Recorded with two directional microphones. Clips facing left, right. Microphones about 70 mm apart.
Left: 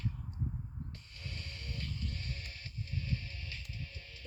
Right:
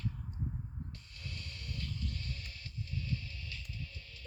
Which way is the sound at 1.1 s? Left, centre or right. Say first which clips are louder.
Even; left.